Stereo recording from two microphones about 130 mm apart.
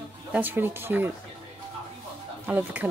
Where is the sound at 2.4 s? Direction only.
15° right (ahead or behind).